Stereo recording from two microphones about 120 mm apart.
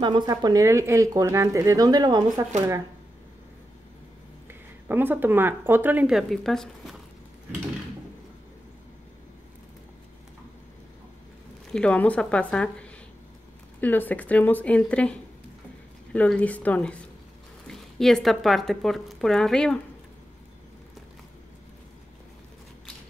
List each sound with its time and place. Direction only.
0.0 s speech: 40° right (ahead or behind)
4.5 s speech: 15° right (ahead or behind)
6.0 s speech: centre (ahead or behind)
11.7 s speech: 10° left (ahead or behind)